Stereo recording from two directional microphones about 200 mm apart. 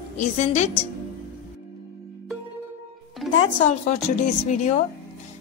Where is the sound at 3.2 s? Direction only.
Centre (ahead or behind).